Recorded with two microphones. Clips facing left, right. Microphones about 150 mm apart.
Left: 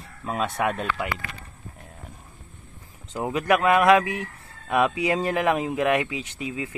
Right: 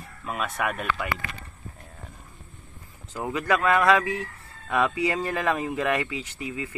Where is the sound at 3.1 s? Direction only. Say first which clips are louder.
Left 3 dB; 20° left (ahead or behind).